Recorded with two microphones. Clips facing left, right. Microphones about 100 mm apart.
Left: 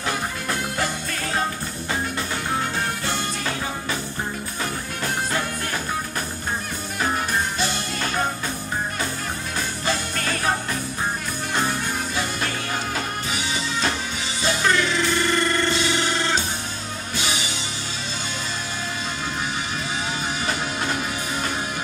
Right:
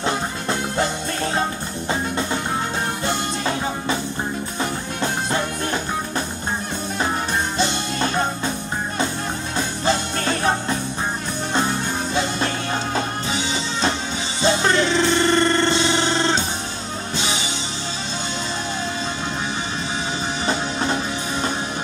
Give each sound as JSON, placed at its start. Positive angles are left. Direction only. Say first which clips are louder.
{"t": 0.0, "sound": "music", "louder": "right 3 dB", "side_deg": -25}
{"t": 3.1, "sound": "music", "louder": "right 3 dB", "side_deg": -25}
{"t": 7.5, "sound": "music", "louder": "right 4 dB", "side_deg": -25}
{"t": 9.6, "sound": "music", "louder": "right 5 dB", "side_deg": -25}
{"t": 12.9, "sound": "music", "louder": "right 4 dB", "side_deg": -25}
{"t": 20.4, "sound": "music", "louder": "right 5 dB", "side_deg": -30}